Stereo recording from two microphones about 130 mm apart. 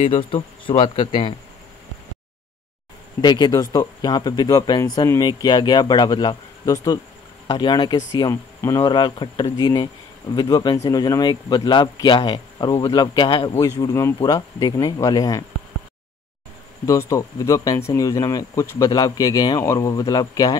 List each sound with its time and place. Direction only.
0.1 s speech: 40° left (ahead or behind)
3.2 s speech: 35° left (ahead or behind)
8.8 s speech: 35° left (ahead or behind)
13.6 s speech: 30° left (ahead or behind)
16.8 s speech: 25° left (ahead or behind)